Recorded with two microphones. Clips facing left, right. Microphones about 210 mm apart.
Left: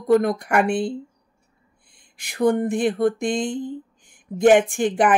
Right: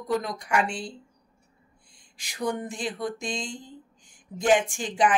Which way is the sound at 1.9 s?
55° left (ahead or behind).